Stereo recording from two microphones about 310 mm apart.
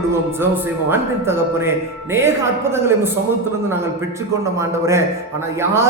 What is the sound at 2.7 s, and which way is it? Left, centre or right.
Speech, centre.